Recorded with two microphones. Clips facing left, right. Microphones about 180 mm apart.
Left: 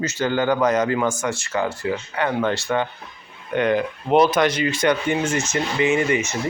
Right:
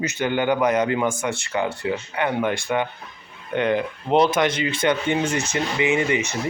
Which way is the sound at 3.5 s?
25° right (ahead or behind).